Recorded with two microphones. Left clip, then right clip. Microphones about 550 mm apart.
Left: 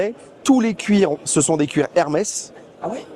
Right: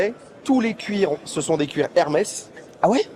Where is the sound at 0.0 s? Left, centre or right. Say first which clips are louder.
Left 2 dB; left.